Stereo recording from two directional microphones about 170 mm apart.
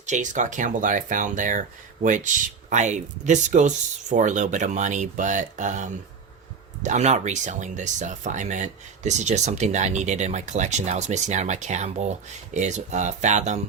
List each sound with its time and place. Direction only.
0.0 s speech: 45° right (ahead or behind)